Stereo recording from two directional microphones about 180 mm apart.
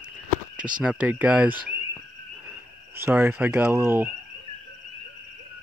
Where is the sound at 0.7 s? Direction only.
5° right (ahead or behind).